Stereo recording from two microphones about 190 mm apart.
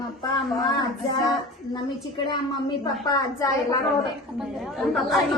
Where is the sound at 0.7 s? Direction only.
20° left (ahead or behind).